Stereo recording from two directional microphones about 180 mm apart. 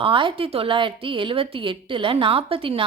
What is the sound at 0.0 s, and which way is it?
A woman's voice, 30° right (ahead or behind).